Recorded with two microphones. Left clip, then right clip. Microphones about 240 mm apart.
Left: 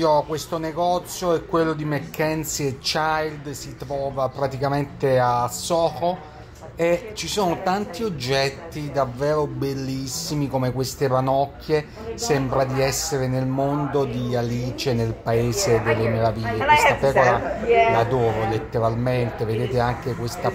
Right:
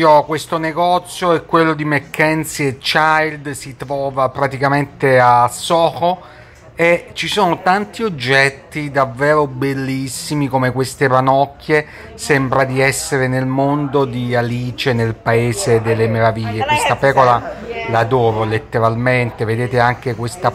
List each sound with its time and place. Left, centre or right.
0.0 s speech: centre
15.5 s speech: right
16.0 s speech: centre
16.4 s speech: right
17.0 s speech: centre